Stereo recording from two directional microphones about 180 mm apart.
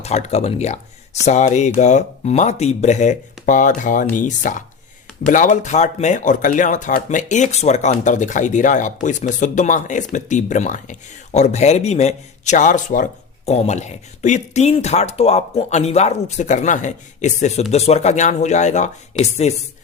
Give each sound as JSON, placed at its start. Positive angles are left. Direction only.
{"t": 0.0, "sound": "speech", "side_deg": 40}